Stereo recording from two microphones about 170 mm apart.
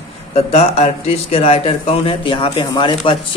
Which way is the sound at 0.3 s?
40° left (ahead or behind).